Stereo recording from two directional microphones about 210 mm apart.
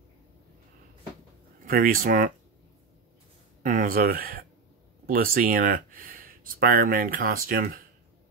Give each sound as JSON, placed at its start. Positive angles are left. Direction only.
{"t": 1.7, "sound": "speech", "side_deg": -40}
{"t": 3.6, "sound": "speech", "side_deg": -40}